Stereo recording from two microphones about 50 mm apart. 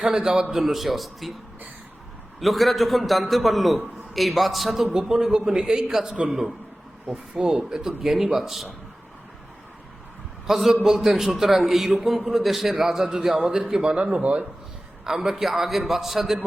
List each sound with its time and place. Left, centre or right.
0.1 s a man's voice: centre
0.5 s a man's voice: centre
2.4 s a man's voice: centre
7.3 s a man's voice: centre
10.4 s a man's voice: centre
14.0 s speech: right
15.0 s a man's voice: centre